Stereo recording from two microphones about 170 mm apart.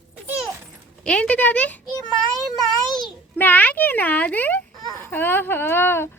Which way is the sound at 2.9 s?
Centre (ahead or behind).